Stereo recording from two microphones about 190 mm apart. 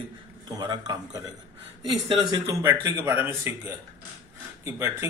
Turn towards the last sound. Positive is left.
turn(degrees=-15)  # may be behind; listen again after turning